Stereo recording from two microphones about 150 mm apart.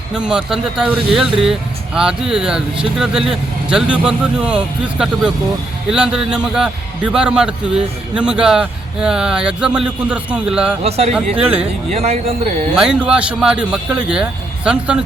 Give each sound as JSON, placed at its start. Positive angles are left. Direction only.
{"t": 0.1, "sound": "speech", "side_deg": -5}
{"t": 10.8, "sound": "speech", "side_deg": -45}
{"t": 12.7, "sound": "a man's voice", "side_deg": -5}